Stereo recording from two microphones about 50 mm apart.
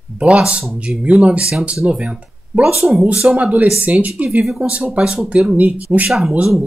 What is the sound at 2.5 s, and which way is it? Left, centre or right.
Speech, right.